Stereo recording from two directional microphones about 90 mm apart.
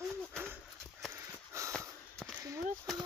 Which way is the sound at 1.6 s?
35° right (ahead or behind).